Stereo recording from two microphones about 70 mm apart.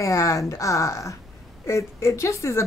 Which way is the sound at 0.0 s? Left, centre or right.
Left.